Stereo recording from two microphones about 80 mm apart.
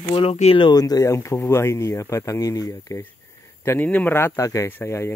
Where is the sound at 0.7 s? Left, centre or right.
Left.